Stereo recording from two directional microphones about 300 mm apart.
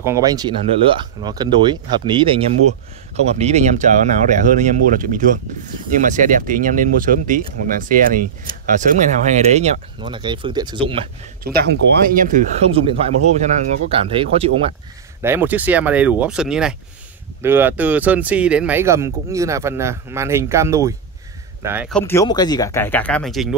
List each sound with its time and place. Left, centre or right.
0.0 s speech: centre
11.4 s speech: right
15.2 s speech: centre